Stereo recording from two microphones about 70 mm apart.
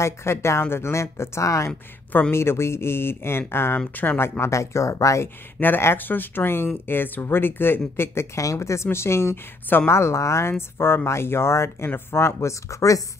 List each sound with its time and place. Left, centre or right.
0.0 s speech: left
4.4 s speech: left
5.2 s speech: left
9.9 s speech: left